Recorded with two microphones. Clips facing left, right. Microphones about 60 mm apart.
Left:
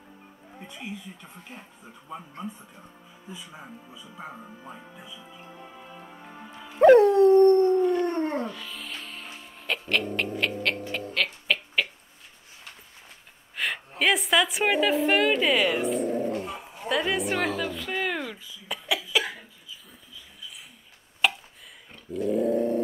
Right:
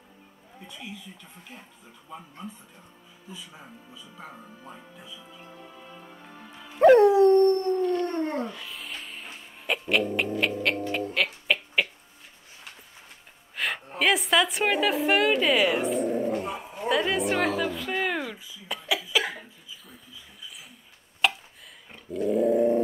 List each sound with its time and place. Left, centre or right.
0.6 s a woman's voice: left
6.6 s dog: centre
7.4 s howl: centre
8.5 s music: centre
11.1 s a sound: centre
13.6 s a woman's voice: centre
16.3 s a sound: centre
21.2 s a sound: centre
22.1 s dog: centre